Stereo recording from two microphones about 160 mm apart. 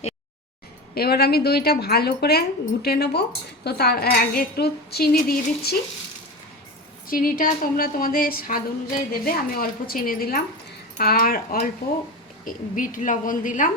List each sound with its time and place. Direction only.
0.9 s speech: 75° left (ahead or behind)
7.1 s speech: 60° left (ahead or behind)